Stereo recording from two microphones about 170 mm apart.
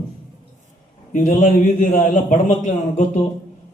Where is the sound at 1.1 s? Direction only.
50° left (ahead or behind).